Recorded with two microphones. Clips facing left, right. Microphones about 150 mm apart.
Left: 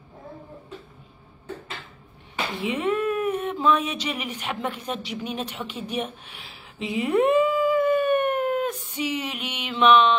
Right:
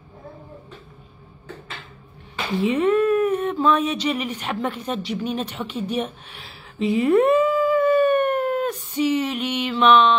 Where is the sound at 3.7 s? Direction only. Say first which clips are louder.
Right 2 dB; 10° left (ahead or behind).